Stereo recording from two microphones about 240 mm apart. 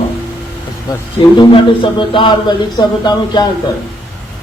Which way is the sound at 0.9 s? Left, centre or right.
Centre.